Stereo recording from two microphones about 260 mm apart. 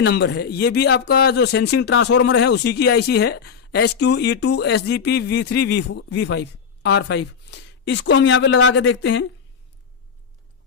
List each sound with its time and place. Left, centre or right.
0.0 s speech: left